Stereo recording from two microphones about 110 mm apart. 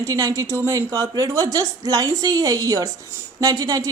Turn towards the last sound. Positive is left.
turn(degrees=-30)  # may be behind; listen again after turning